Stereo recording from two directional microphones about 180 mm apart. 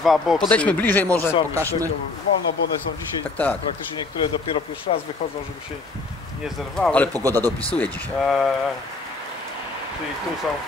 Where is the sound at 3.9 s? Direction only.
25° left (ahead or behind).